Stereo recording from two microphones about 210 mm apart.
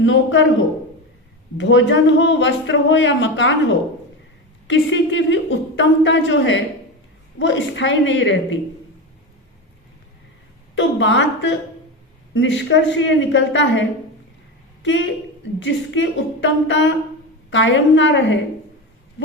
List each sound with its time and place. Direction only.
0.0 s speech: 60° left (ahead or behind)
1.5 s speech: 60° left (ahead or behind)
10.8 s speech: 60° left (ahead or behind)
15.6 s speech: 60° left (ahead or behind)